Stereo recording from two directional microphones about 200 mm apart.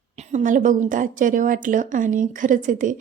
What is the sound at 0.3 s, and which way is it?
Speech, 40° right (ahead or behind).